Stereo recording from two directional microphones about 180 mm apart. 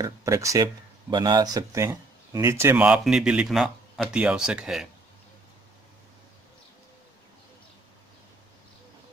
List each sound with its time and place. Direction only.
0.0 s speech: 15° right (ahead or behind)